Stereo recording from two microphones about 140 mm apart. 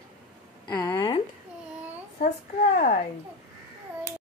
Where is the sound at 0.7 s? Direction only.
30° left (ahead or behind).